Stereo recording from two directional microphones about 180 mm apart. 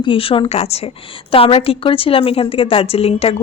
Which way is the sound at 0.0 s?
30° left (ahead or behind).